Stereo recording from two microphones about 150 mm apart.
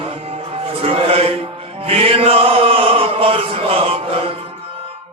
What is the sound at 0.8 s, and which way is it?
Music, 40° right (ahead or behind).